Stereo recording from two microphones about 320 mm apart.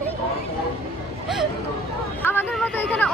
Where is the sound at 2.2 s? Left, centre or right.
Centre.